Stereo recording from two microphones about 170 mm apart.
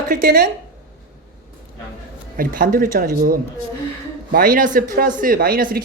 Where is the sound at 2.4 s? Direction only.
55° right (ahead or behind).